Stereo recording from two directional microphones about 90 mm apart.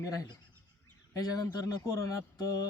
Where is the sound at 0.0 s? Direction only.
40° left (ahead or behind).